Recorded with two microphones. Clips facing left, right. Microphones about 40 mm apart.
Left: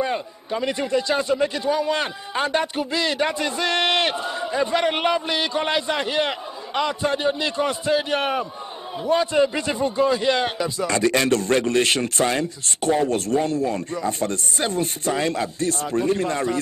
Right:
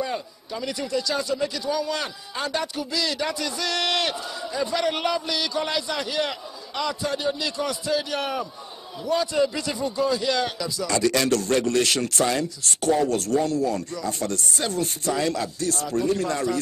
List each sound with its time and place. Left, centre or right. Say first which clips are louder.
0.0 s a man's voice: left 4 dB; left